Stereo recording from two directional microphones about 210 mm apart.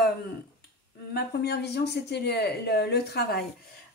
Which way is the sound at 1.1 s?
50° left (ahead or behind).